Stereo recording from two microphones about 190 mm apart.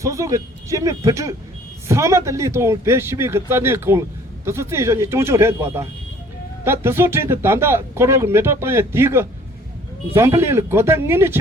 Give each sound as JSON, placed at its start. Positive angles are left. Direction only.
{"t": 0.0, "sound": "speech", "side_deg": -15}